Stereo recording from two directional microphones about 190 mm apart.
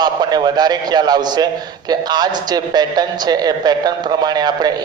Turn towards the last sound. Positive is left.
turn(degrees=-20)  # may be behind; listen again after turning